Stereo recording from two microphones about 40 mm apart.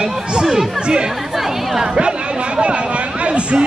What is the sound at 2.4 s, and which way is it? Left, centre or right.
Chatter, right.